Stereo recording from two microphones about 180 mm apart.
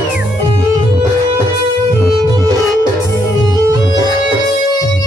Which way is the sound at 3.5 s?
20° right (ahead or behind).